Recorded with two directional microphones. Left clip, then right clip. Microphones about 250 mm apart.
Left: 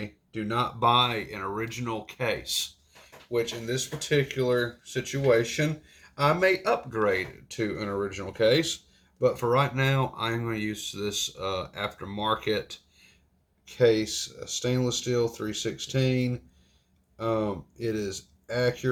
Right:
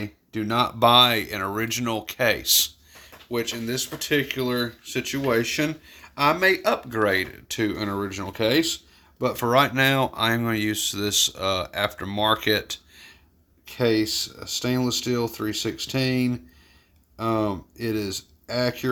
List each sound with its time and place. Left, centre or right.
0.0 s speech: right